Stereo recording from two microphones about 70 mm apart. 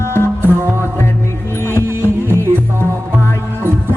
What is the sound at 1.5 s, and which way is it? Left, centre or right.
Music, left.